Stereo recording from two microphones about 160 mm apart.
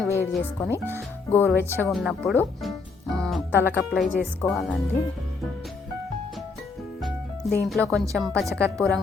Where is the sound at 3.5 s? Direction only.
15° left (ahead or behind).